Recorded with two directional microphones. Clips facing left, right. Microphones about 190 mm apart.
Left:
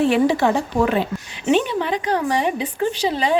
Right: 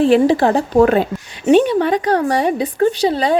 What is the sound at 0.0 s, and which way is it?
A woman's voice, 35° right (ahead or behind).